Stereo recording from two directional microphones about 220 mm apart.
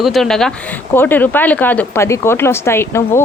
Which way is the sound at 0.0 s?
Centre (ahead or behind).